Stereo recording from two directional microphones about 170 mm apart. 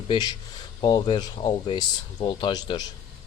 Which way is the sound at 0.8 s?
25° left (ahead or behind).